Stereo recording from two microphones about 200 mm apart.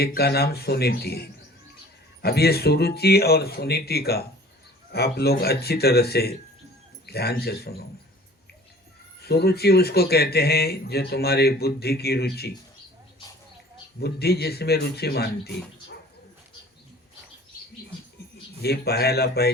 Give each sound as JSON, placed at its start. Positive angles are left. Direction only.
{"t": 0.0, "sound": "speech", "side_deg": 50}
{"t": 9.2, "sound": "speech", "side_deg": 55}
{"t": 14.0, "sound": "speech", "side_deg": 55}
{"t": 18.6, "sound": "speech", "side_deg": 55}